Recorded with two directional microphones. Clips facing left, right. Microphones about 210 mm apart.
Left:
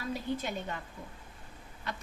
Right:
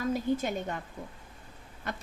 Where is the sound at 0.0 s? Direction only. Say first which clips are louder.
Right 6 dB; 45° right (ahead or behind).